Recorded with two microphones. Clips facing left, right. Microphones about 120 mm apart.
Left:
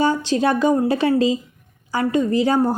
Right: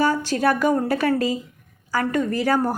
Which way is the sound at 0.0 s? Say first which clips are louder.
Left 2 dB; 20° left (ahead or behind).